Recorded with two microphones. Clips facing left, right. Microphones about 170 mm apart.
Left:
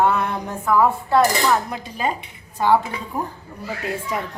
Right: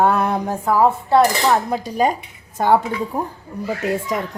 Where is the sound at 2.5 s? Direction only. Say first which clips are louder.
Right 2 dB; 45° right (ahead or behind).